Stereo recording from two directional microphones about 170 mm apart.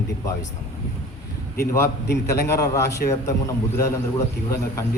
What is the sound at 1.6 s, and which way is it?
A man's voice, 15° left (ahead or behind).